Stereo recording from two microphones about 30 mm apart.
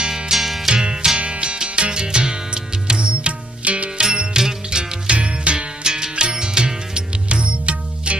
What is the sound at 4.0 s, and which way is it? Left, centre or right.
Music, right.